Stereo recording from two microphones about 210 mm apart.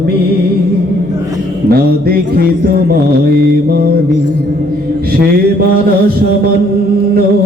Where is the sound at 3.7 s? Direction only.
45° right (ahead or behind).